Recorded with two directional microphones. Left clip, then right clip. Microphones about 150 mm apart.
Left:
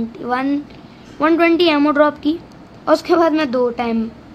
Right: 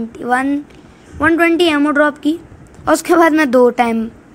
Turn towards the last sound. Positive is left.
turn(degrees=-35)  # may be behind; listen again after turning